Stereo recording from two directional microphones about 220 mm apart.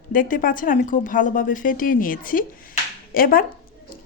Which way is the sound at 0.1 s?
40° left (ahead or behind).